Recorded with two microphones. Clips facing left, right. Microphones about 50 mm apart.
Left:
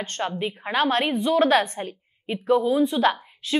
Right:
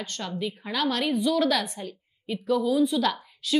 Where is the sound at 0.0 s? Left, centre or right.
Left.